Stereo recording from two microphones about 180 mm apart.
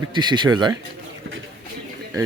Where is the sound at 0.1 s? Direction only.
25° right (ahead or behind).